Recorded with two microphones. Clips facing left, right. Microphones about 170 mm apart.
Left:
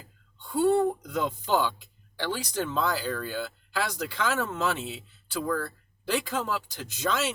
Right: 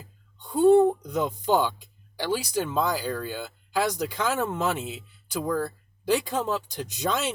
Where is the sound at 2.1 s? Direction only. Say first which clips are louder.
Right 4 dB; 10° right (ahead or behind).